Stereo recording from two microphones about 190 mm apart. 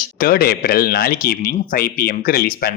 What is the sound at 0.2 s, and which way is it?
Speech, 55° left (ahead or behind).